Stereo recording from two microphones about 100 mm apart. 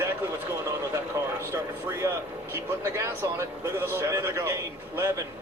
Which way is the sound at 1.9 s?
25° right (ahead or behind).